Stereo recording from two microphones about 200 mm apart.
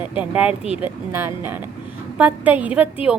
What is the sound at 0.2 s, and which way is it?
A woman's voice, 5° right (ahead or behind).